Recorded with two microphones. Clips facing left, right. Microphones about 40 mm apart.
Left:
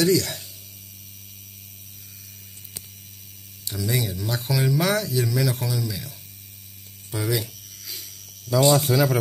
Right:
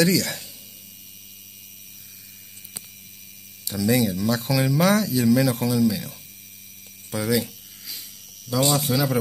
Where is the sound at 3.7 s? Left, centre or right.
Right.